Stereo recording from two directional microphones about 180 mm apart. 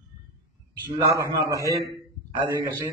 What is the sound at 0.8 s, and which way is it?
A man's voice, 15° right (ahead or behind).